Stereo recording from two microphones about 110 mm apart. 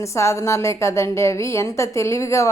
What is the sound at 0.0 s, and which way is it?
Speech, 25° left (ahead or behind).